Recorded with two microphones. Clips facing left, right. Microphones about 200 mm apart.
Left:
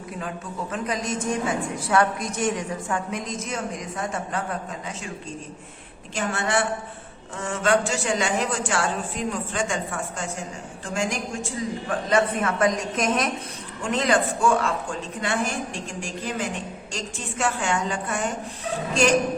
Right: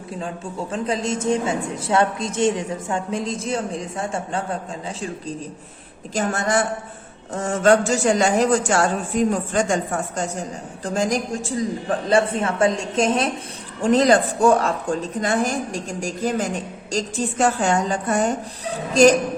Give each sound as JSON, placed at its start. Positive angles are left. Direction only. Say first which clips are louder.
{"t": 0.2, "sound": "a woman's voice", "louder": "right 3 dB", "side_deg": -30}
{"t": 6.1, "sound": "a woman's voice", "louder": "right 4 dB", "side_deg": -40}